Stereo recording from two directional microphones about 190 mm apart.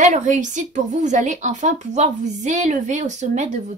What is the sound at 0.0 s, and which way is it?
Speech, 40° right (ahead or behind).